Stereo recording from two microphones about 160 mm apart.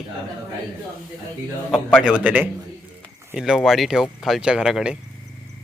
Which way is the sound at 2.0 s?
10° right (ahead or behind).